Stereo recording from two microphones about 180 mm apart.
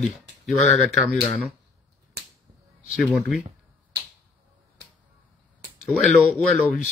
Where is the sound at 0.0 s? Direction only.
Centre (ahead or behind).